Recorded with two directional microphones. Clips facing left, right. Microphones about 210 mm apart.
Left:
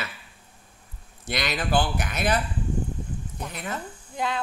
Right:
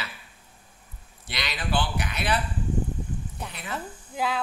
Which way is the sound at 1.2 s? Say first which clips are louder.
Left 6 dB; 45° left (ahead or behind).